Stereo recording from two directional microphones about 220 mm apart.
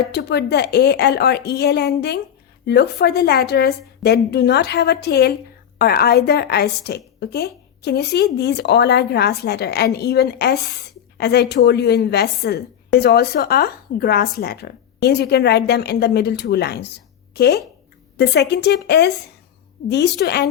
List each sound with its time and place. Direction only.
0.1 s a woman's voice: 50° left (ahead or behind)